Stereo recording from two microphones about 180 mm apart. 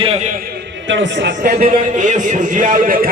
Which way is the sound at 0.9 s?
90° right.